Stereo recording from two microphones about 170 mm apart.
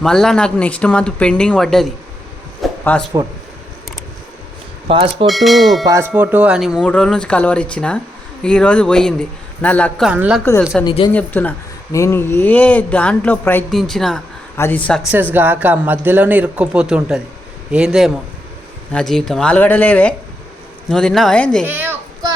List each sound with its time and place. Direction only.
0.0 s speech: 5° left (ahead or behind)
2.6 s a sound: centre (ahead or behind)
3.2 s tubular bells: 20° right (ahead or behind)
4.9 s speech: 35° right (ahead or behind)
5.2 s speech: centre (ahead or behind)
5.8 s tubular bells: 20° right (ahead or behind)
6.1 s speech: 10° right (ahead or behind)
6.7 s speech: 5° left (ahead or behind)
10.1 s speech: 5° right (ahead or behind)
10.8 s speech: 25° left (ahead or behind)
11.1 s speech: 10° left (ahead or behind)
15.0 s speech: 10° right (ahead or behind); by 21.7 s 5° left (ahead or behind)
21.7 s a child's voice: 10° right (ahead or behind)